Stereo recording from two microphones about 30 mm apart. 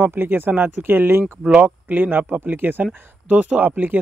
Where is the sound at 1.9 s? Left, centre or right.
Right.